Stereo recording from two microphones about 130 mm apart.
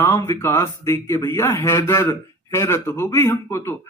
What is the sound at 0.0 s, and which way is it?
A man's voice, 20° left (ahead or behind).